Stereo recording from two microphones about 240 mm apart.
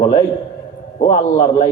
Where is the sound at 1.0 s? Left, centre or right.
Left.